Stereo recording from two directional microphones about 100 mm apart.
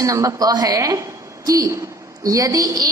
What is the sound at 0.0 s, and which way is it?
A woman's voice, 35° right (ahead or behind).